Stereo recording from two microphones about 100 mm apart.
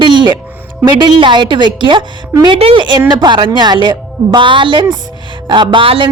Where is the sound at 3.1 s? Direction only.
45° right (ahead or behind).